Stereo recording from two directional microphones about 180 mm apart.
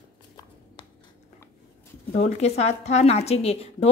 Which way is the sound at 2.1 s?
35° left (ahead or behind).